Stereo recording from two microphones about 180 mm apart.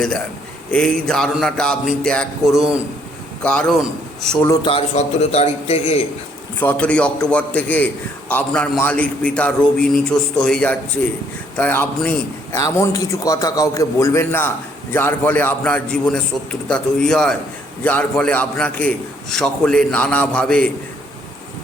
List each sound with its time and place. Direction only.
0.7 s a man's voice: 5° left (ahead or behind)
4.6 s a man's voice: 35° left (ahead or behind)
6.6 s a man's voice: 10° left (ahead or behind)